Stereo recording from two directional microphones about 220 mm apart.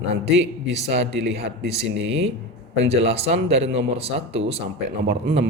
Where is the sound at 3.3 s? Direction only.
55° right (ahead or behind).